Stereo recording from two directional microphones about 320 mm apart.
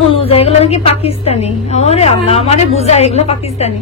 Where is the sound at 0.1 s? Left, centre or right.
Centre.